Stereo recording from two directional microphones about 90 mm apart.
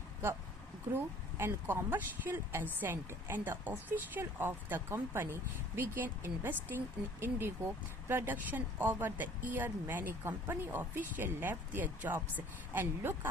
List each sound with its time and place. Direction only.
0.9 s speech: 25° right (ahead or behind)